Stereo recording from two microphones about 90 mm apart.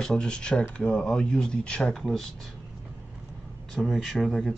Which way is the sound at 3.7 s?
Centre (ahead or behind).